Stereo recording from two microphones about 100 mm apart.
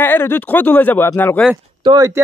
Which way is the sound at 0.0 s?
20° left (ahead or behind).